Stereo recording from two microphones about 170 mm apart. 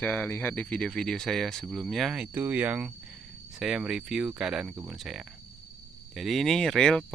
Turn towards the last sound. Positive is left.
turn(degrees=5)  # may be behind; listen again after turning